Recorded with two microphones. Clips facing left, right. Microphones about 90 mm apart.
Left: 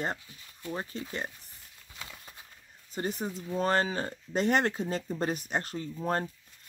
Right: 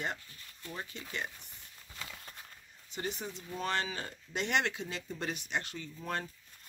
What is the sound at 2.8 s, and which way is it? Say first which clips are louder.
Speech: left 6 dB; 40° left (ahead or behind).